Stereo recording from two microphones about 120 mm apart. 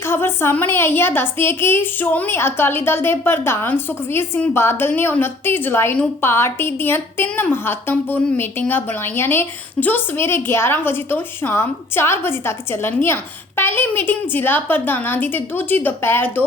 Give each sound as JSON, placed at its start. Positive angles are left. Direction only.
{"t": 0.1, "sound": "a woman's voice", "side_deg": 20}